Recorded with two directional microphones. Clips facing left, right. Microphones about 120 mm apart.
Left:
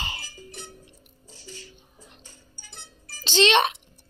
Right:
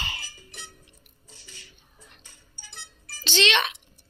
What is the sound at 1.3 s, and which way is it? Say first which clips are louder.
Music: left 8 dB; 40° left (ahead or behind).